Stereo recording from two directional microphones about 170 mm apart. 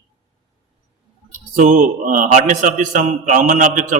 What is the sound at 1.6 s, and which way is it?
A man's voice, 50° right (ahead or behind).